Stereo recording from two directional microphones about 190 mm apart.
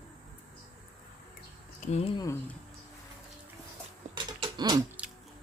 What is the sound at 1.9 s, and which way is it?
Speech, 35° left (ahead or behind).